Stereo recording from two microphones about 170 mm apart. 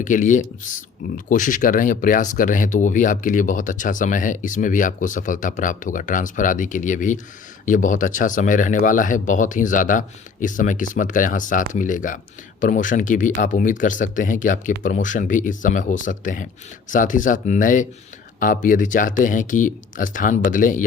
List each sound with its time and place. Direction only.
0.0 s speech: 50° left (ahead or behind)